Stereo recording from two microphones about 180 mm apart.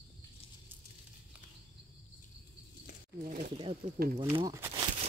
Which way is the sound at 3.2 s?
45° right (ahead or behind).